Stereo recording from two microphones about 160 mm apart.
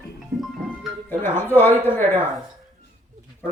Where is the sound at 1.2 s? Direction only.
15° left (ahead or behind).